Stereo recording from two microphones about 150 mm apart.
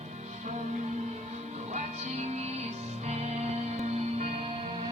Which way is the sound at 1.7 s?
45° right (ahead or behind).